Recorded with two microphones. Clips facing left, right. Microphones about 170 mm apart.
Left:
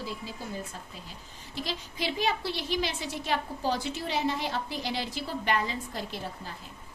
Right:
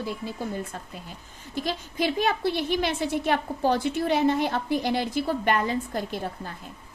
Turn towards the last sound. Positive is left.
turn(degrees=-50)  # may be behind; listen again after turning